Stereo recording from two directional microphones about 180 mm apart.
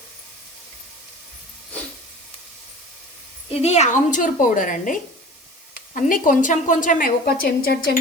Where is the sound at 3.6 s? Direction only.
40° left (ahead or behind).